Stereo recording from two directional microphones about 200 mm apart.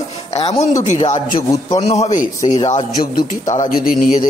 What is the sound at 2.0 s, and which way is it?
Speech, 40° left (ahead or behind).